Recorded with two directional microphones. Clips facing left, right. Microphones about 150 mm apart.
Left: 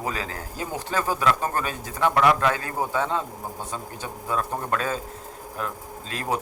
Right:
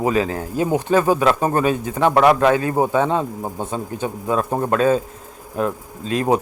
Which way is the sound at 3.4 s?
55° right (ahead or behind).